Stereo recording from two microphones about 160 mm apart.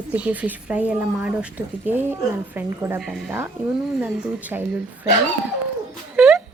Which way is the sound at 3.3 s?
15° right (ahead or behind).